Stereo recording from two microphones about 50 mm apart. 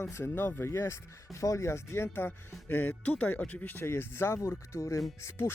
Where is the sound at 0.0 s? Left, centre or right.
Left.